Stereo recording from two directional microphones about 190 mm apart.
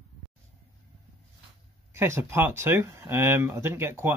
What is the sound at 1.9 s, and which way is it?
Speech, 15° right (ahead or behind).